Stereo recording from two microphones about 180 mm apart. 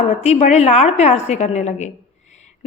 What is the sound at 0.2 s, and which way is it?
A woman's voice, 40° left (ahead or behind).